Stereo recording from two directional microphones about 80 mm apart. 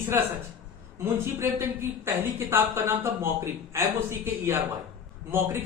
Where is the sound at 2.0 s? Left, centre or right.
Right.